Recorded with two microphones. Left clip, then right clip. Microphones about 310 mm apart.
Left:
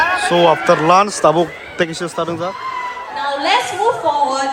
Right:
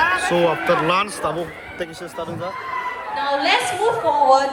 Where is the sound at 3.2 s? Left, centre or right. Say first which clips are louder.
Left 2 dB; left.